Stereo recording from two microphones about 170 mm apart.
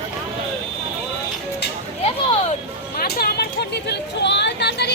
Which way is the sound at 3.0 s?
65° left (ahead or behind).